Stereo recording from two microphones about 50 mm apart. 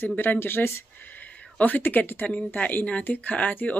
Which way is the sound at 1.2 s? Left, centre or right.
Left.